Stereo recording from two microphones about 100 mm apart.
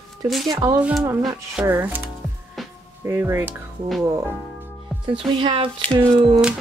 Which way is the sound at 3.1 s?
25° right (ahead or behind).